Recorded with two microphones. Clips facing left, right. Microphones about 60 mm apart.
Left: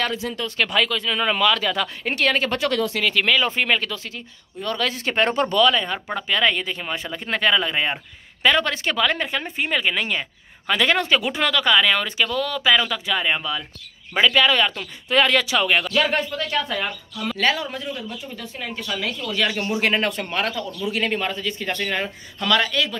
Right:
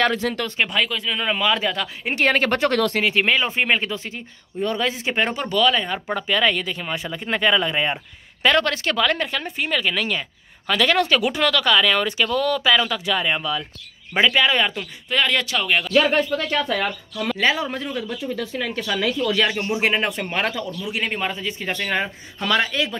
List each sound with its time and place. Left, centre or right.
0.0 s speech: right
0.7 s speech: centre
2.3 s speech: right
3.0 s a woman's voice: right; by 11.1 s centre
11.1 s speech: centre
11.4 s speech: centre
14.1 s speech: centre
14.8 s speech: centre
16.3 s speech: right
17.4 s speech: centre
17.6 s speech: right
17.9 s speech: right
19.5 s speech: centre
20.8 s speech: centre